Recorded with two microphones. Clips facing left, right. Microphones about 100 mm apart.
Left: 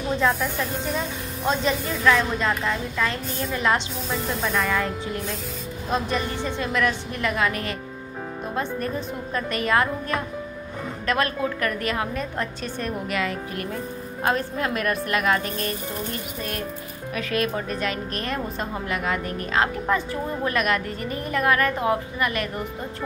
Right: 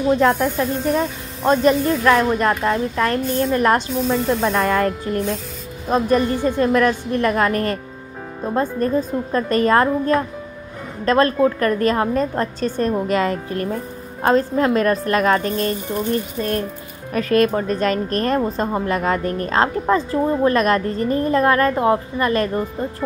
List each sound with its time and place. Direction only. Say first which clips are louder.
1.4 s a woman's voice: right 9 dB; 50° right (ahead or behind)
8.5 s a woman's voice: right 9 dB; 35° right (ahead or behind)
17.1 s a woman's voice: right 9 dB; 40° right (ahead or behind)